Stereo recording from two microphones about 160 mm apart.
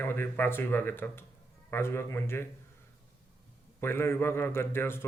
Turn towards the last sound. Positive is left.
turn(degrees=15)  # may be behind; listen again after turning